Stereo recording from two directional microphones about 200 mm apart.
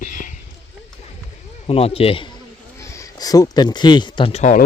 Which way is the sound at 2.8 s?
15° left (ahead or behind).